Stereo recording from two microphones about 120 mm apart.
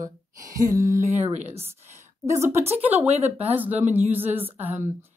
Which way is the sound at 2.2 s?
25° right (ahead or behind).